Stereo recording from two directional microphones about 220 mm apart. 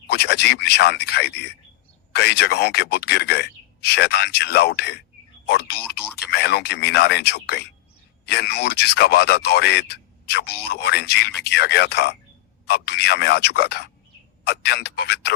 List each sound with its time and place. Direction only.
0.1 s speech: 50° left (ahead or behind)